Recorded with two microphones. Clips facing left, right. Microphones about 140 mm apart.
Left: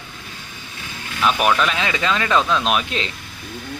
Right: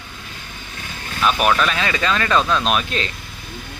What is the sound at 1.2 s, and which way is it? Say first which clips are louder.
Speech: even; 15° left (ahead or behind).